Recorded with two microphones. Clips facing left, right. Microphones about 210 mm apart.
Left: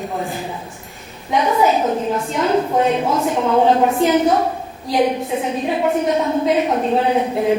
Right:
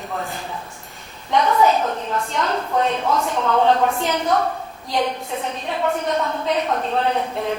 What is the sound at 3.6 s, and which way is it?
Speech, centre (ahead or behind).